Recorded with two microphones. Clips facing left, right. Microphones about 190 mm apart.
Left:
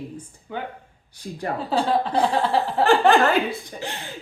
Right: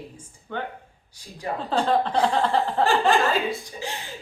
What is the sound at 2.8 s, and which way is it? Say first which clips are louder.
Speech: left 5 dB; 60° left (ahead or behind).